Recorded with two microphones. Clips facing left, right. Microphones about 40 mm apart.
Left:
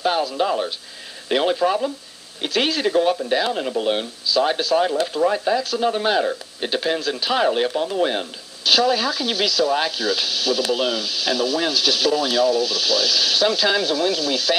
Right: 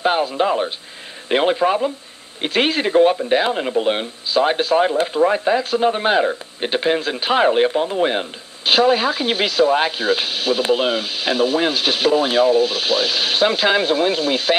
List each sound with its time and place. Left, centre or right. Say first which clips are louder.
0.0 s speech: right 3 dB; right
4.3 s speech: right 2 dB; right